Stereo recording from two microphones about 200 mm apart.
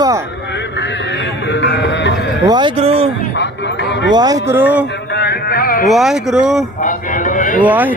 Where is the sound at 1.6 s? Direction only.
60° left (ahead or behind).